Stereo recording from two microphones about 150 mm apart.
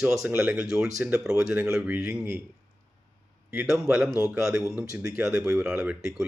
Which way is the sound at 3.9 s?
5° right (ahead or behind).